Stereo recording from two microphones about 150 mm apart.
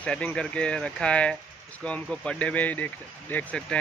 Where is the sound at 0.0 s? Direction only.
10° left (ahead or behind).